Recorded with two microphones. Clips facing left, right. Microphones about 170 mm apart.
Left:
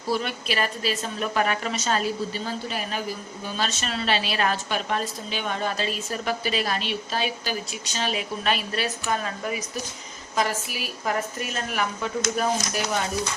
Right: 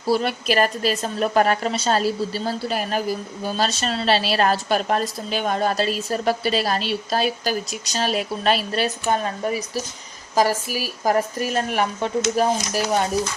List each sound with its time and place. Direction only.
0.1 s a woman's voice: 35° right (ahead or behind)